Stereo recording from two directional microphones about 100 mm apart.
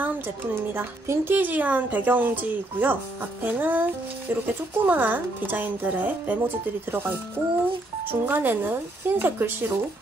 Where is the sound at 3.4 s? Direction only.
20° right (ahead or behind).